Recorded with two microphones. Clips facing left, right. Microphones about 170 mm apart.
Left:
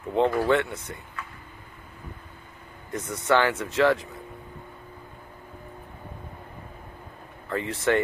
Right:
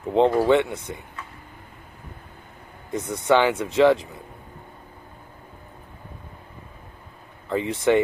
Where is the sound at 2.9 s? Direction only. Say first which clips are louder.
Right 4 dB; 20° right (ahead or behind).